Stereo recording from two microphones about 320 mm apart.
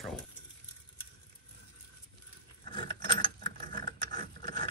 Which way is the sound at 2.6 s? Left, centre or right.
Right.